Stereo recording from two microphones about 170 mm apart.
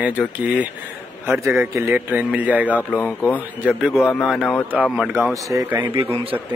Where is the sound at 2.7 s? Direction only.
10° left (ahead or behind).